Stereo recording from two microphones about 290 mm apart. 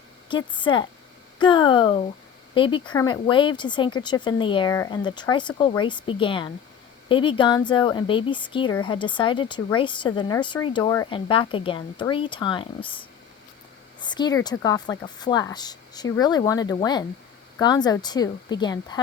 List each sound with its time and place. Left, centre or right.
0.3 s speech: centre
14.0 s speech: centre